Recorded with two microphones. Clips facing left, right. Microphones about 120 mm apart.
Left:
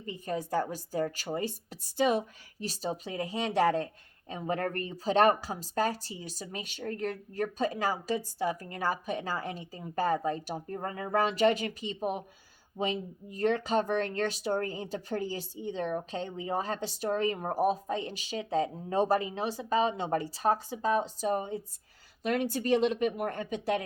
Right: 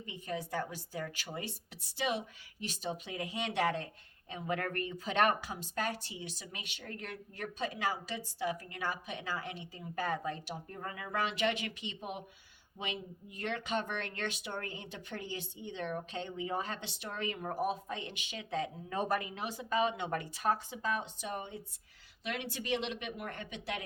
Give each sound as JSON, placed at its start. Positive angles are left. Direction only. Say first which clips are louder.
{"t": 0.0, "sound": "speech", "louder": "left 5 dB", "side_deg": 40}